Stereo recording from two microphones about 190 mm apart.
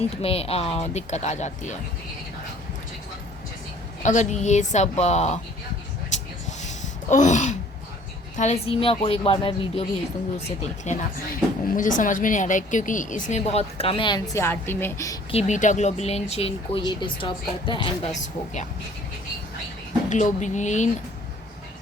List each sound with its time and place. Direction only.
0.2 s speech: 30° left (ahead or behind)
4.0 s speech: 40° left (ahead or behind)
6.1 s a sound: 40° left (ahead or behind)
8.4 s speech: 35° left (ahead or behind)
14.3 s a woman's voice: 10° left (ahead or behind)
15.3 s speech: 35° left (ahead or behind)
18.1 s speech: 40° left (ahead or behind)
20.1 s speech: 40° left (ahead or behind)